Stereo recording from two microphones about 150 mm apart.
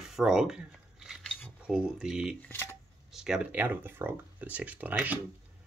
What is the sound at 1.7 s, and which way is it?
Speech, 5° right (ahead or behind).